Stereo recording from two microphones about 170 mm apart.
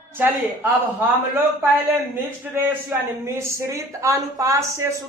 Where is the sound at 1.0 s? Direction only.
15° right (ahead or behind).